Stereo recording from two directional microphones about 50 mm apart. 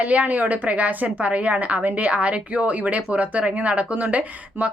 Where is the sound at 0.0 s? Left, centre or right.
Right.